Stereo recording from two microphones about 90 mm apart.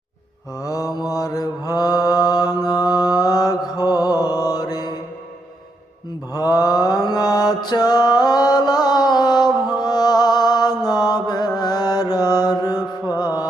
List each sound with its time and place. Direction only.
0.6 s mantra: 40° left (ahead or behind)
6.3 s mantra: 45° left (ahead or behind)
12.5 s music: 50° left (ahead or behind)